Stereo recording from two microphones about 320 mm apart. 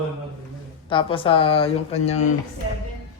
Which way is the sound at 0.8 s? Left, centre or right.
Centre.